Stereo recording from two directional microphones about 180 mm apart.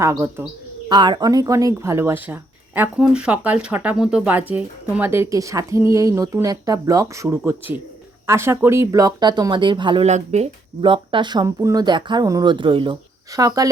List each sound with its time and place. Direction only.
0.0 s speech: 15° right (ahead or behind)